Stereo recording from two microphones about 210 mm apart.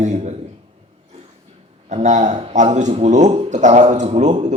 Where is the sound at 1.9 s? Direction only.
35° right (ahead or behind).